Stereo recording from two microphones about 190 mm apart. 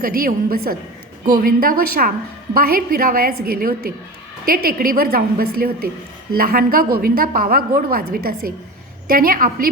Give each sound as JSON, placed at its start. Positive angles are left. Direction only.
{"t": 0.0, "sound": "a woman's voice", "side_deg": -50}